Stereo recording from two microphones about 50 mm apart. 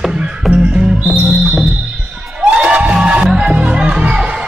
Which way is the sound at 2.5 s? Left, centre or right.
Right.